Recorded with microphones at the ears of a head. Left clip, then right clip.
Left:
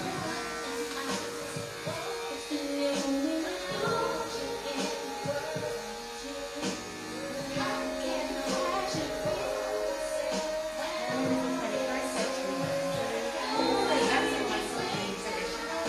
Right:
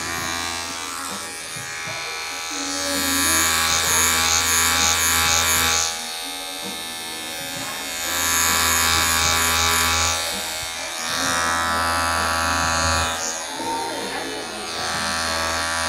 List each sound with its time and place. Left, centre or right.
2.9 s music: right
8.2 s electric shaver: right
15.0 s electric shaver: right